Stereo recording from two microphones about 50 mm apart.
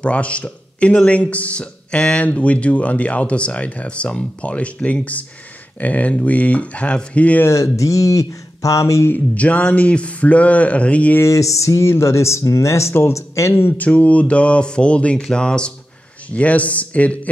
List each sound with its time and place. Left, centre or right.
0.0 s speech: left
7.4 s speech: left
9.1 s speech: left
11.2 s speech: left
13.7 s speech: left
16.3 s speech: left